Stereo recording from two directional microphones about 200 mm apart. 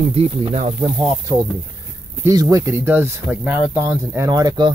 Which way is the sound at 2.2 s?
20° right (ahead or behind).